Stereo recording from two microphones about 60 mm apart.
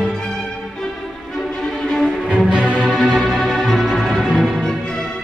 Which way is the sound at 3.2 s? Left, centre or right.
Centre.